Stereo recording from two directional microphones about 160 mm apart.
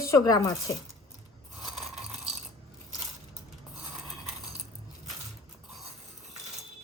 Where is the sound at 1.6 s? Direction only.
Centre (ahead or behind).